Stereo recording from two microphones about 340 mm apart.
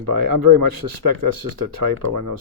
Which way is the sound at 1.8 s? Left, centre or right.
Right.